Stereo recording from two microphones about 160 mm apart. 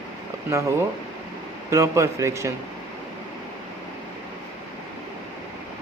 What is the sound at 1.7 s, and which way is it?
Speech, 20° right (ahead or behind).